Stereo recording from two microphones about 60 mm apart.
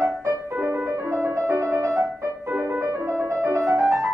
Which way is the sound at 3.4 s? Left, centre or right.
Right.